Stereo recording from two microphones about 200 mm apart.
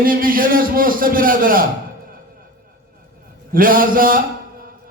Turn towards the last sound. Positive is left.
turn(degrees=-45)  # may be behind; listen again after turning